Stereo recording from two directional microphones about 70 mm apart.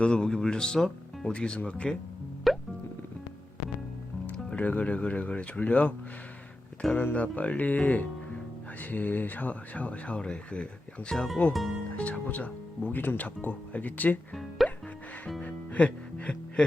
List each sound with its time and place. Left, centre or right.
0.0 s speech: centre
2.5 s music: centre
4.4 s speech: centre
6.9 s speech: left
11.1 s speech: centre
11.9 s speech: centre
14.6 s music: centre
15.4 s music: left